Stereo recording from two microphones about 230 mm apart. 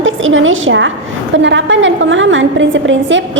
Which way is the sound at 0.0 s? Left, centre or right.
Right.